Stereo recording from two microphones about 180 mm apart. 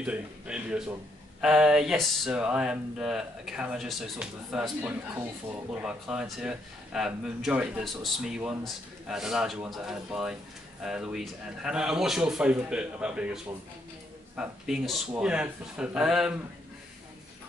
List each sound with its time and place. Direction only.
0.0 s speech: 5° right (ahead or behind)